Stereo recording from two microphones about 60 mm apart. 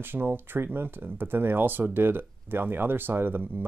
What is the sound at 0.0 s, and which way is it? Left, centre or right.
Speech, right.